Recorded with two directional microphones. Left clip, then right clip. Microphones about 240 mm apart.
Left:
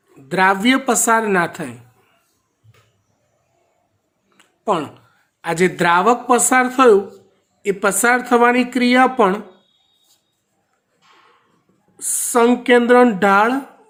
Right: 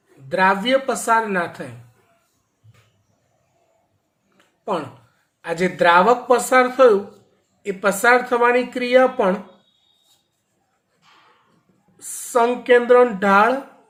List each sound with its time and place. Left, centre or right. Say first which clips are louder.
0.3 s speech: left 2 dB; left
4.4 s a sound: left 5 dB; left
5.4 s speech: left 2 dB; left
11.9 s speech: left 2 dB; left